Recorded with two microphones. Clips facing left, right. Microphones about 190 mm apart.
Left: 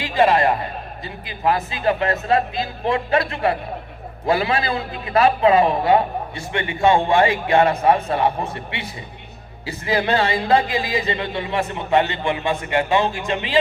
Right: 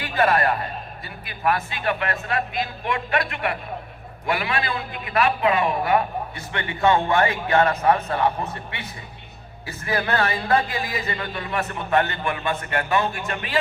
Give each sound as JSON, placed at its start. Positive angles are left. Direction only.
{"t": 0.0, "sound": "a man's voice", "side_deg": 15}